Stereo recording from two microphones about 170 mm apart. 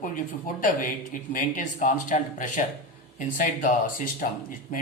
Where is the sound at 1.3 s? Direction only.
50° left (ahead or behind).